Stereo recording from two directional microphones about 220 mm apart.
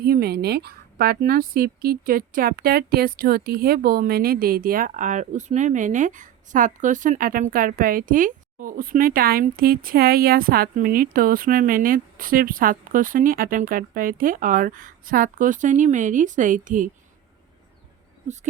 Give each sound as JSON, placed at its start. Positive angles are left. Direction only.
{"t": 0.0, "sound": "a woman's voice", "side_deg": -45}